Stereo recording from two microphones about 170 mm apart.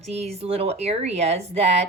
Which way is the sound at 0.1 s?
40° right (ahead or behind).